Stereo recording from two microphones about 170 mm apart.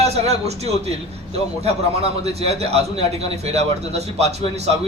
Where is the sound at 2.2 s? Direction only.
40° right (ahead or behind).